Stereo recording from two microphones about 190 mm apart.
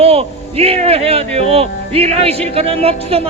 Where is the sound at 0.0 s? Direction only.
30° right (ahead or behind).